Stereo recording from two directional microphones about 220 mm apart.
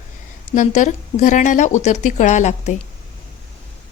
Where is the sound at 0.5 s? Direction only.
35° left (ahead or behind).